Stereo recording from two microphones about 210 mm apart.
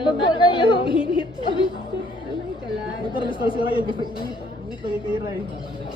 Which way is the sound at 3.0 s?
25° left (ahead or behind).